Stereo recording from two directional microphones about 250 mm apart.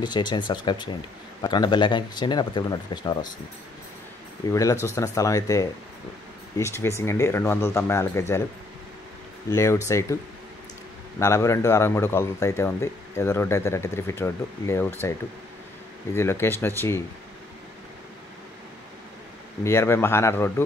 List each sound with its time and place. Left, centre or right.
0.0 s a man's voice: centre
4.5 s a man's voice: centre
9.5 s a man's voice: centre
11.1 s a man's voice: centre
19.6 s a man's voice: centre